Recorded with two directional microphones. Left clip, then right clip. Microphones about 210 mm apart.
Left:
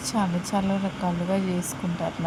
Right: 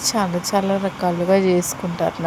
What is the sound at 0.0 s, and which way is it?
Speech, 15° right (ahead or behind).